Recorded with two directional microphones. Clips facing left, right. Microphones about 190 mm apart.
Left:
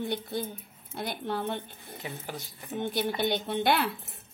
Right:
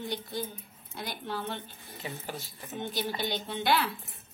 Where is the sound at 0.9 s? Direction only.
55° left (ahead or behind).